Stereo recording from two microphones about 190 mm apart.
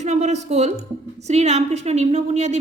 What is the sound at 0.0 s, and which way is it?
A woman's voice, 35° right (ahead or behind).